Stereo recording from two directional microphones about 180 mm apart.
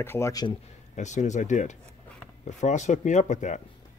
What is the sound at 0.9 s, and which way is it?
Speech, 40° left (ahead or behind).